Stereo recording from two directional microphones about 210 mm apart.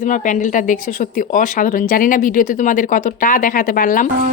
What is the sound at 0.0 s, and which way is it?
Speech, 35° left (ahead or behind).